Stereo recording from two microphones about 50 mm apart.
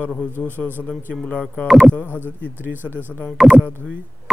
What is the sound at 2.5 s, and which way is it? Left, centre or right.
Speech, right.